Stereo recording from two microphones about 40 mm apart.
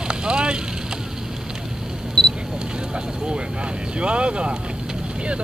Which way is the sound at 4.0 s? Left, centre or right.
Right.